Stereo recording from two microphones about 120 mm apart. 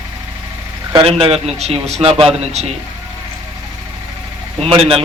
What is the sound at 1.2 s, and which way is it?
A man's voice, 60° right (ahead or behind).